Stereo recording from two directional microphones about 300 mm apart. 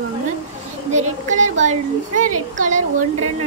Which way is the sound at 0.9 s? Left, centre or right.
Right.